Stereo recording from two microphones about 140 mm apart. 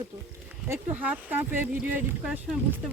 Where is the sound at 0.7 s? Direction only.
15° right (ahead or behind).